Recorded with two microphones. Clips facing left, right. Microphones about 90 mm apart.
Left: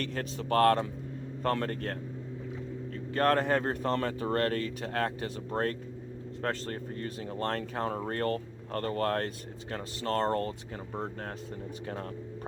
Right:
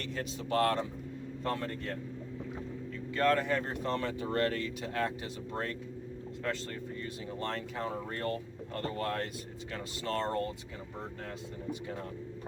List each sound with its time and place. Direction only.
0.0 s speech: 55° left (ahead or behind)
3.1 s speech: 50° left (ahead or behind)